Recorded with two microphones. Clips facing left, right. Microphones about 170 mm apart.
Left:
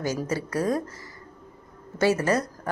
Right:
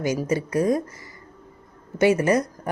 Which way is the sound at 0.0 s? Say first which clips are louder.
Right 4 dB; 15° right (ahead or behind).